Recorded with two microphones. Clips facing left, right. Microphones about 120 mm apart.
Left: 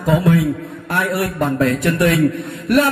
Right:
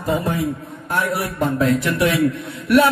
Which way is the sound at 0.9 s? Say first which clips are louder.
Left 2 dB; 70° left (ahead or behind).